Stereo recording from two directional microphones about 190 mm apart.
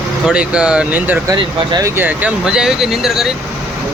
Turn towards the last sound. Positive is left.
turn(degrees=0)  # may be behind; listen again after turning